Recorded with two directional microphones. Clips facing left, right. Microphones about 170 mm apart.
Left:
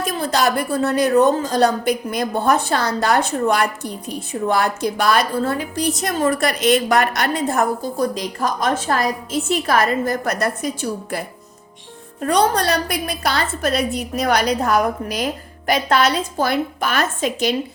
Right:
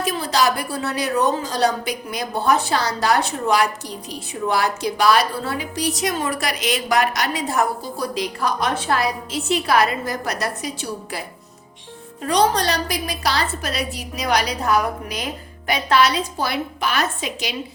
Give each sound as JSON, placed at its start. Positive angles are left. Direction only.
{"t": 0.0, "sound": "a woman's voice", "side_deg": 50}